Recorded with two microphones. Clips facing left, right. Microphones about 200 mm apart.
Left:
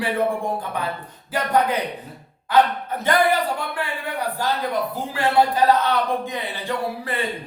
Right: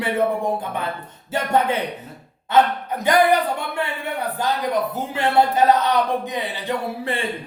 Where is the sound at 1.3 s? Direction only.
25° right (ahead or behind).